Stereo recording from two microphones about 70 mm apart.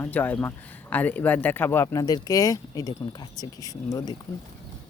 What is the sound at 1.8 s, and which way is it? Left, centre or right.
Speech, left.